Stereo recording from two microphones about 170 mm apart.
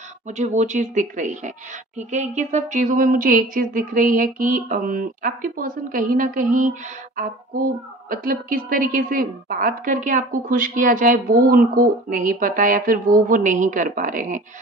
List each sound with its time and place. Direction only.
0.3 s speech: 45° right (ahead or behind)